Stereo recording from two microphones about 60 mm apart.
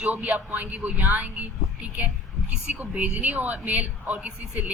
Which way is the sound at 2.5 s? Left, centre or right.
Right.